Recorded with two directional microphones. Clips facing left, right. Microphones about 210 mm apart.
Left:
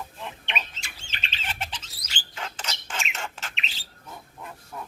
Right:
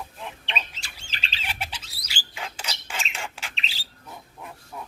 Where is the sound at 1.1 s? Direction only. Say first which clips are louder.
Right 1 dB; 35° right (ahead or behind).